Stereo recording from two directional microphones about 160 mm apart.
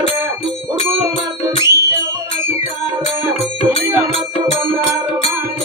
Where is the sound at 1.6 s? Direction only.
20° right (ahead or behind).